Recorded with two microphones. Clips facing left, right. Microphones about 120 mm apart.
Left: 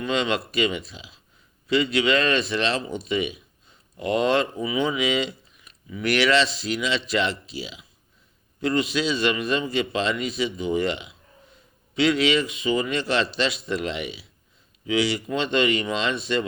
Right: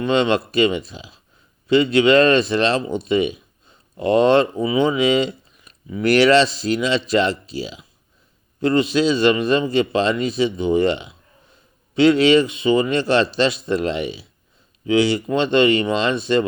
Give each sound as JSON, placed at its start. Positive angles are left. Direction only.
{"t": 0.0, "sound": "a man's voice", "side_deg": -30}